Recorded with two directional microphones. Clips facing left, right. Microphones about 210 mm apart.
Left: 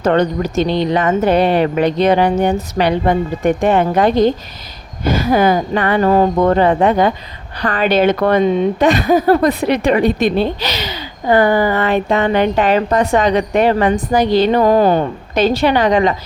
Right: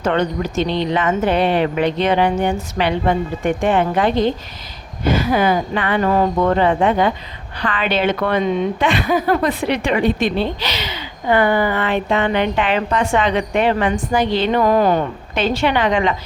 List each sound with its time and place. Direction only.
0.0 s a woman's voice: 40° left (ahead or behind)